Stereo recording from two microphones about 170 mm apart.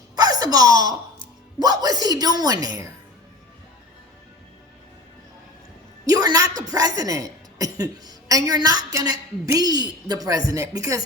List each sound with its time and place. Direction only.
0.2 s a sound: 20° right (ahead or behind)
1.5 s a woman's voice: 25° right (ahead or behind)
6.1 s a woman's voice: 20° right (ahead or behind)